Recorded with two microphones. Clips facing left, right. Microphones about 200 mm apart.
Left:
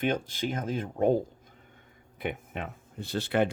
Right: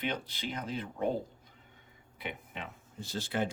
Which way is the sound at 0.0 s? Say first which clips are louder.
Left 7 dB; 50° left (ahead or behind).